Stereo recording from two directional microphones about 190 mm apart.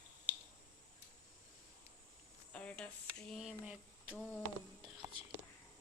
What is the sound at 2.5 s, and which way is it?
Speech, 5° left (ahead or behind).